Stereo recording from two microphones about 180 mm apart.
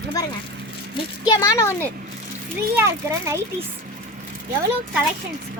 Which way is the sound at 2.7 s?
15° right (ahead or behind).